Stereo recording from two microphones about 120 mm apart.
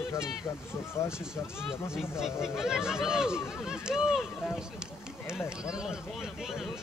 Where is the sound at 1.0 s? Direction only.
25° left (ahead or behind).